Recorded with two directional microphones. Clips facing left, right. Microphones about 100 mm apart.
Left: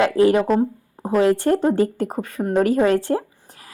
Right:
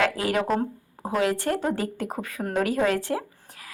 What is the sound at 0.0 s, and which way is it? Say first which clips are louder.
A woman's voice: left 8 dB; 30° left (ahead or behind).